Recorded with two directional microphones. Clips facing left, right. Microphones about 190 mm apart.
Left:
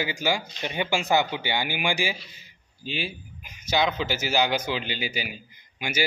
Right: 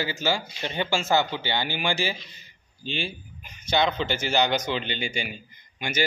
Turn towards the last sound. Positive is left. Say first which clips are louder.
# even
turn(degrees=5)  # may be behind; listen again after turning